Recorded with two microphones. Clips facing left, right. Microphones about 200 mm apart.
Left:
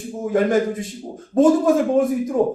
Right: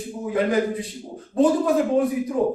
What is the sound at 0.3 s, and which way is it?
A man's voice, 45° left (ahead or behind).